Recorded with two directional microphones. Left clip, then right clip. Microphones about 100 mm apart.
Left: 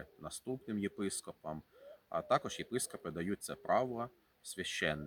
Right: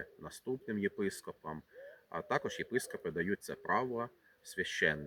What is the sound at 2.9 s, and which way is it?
Speech, 40° left (ahead or behind).